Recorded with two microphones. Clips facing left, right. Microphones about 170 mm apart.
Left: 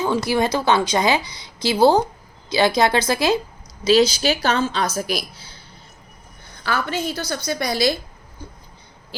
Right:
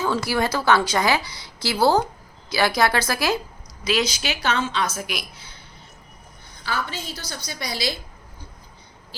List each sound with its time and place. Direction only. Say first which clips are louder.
0.0 s a woman's voice: left 3 dB; 20° left (ahead or behind); by 5.5 s 35° left (ahead or behind)
6.7 s a woman's voice: left 6 dB; 55° left (ahead or behind)